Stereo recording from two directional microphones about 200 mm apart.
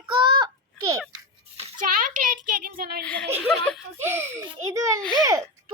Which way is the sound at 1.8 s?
45° right (ahead or behind).